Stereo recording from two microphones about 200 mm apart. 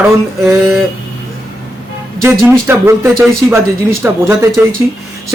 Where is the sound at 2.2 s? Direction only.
10° right (ahead or behind).